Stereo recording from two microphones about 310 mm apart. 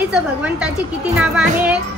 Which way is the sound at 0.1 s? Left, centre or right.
Centre.